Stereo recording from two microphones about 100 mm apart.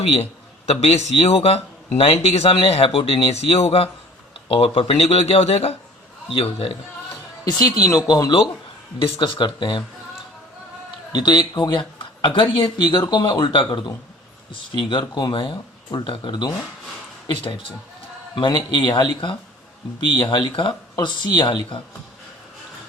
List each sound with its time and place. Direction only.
0.7 s speech: 90° left
6.3 s speech: 65° left (ahead or behind)
7.4 s speech: 40° left (ahead or behind)
9.0 s speech: 55° left (ahead or behind)
11.1 s speech: 45° left (ahead or behind)
18.3 s speech: 45° left (ahead or behind)